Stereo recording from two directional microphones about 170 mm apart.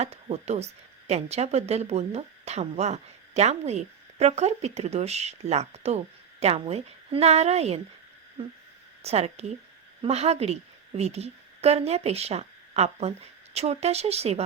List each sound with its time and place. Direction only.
0.0 s speech: 40° right (ahead or behind)
9.0 s a woman's voice: 40° right (ahead or behind)